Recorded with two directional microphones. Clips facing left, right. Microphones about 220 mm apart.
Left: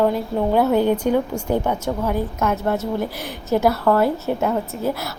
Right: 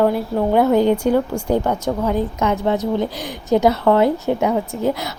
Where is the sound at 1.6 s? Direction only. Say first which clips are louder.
Right 2 dB; 5° left (ahead or behind).